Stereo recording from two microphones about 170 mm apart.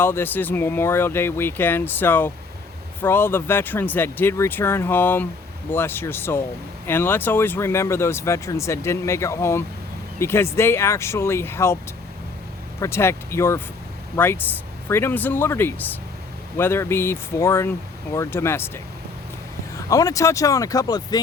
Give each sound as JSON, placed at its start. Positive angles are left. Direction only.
{"t": 0.0, "sound": "speech", "side_deg": 15}
{"t": 12.8, "sound": "speech", "side_deg": 15}
{"t": 19.7, "sound": "speech", "side_deg": 20}